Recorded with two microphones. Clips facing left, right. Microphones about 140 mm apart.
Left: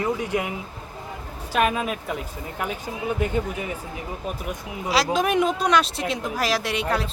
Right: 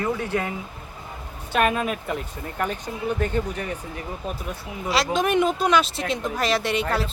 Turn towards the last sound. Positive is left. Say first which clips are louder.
# right 1 dB
turn(degrees=0)  # may be behind; listen again after turning